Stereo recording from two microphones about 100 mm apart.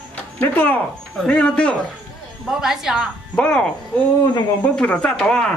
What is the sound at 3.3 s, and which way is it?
Speech, 10° left (ahead or behind).